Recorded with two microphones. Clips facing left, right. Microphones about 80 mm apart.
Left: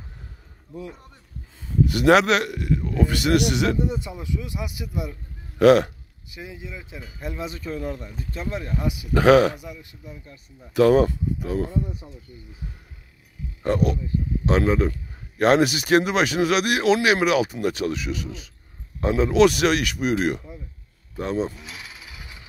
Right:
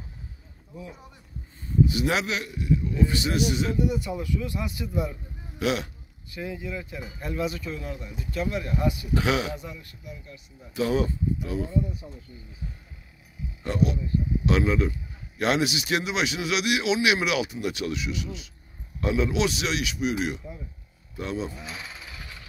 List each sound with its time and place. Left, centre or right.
1.6 s speech: left
3.8 s speech: left
4.2 s speech: centre
5.6 s a man's voice: left
6.3 s speech: centre
7.5 s speech: left
9.1 s a man's voice: left
9.6 s speech: centre
10.0 s speech: left
10.7 s a man's voice: left
13.6 s a man's voice: left
21.5 s jackhammer: centre